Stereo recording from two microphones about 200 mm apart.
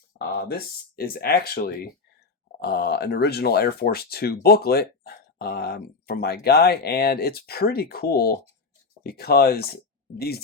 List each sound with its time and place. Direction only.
0.2 s speech: 50° left (ahead or behind)